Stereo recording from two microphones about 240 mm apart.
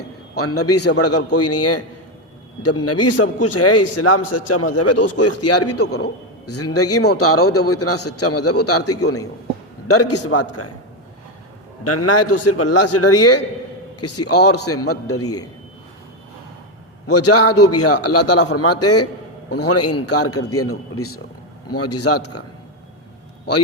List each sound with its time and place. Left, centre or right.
0.3 s a man's voice: left
11.8 s a man's voice: left
17.1 s a man's voice: left
21.7 s a man's voice: left